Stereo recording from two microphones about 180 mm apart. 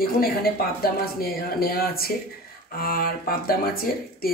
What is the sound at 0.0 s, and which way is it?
A man's voice, 55° left (ahead or behind).